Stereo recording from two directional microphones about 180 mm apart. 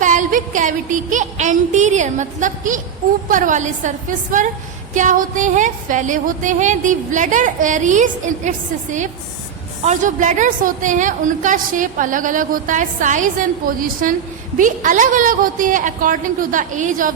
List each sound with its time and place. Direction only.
0.0 s a woman's voice: 45° right (ahead or behind)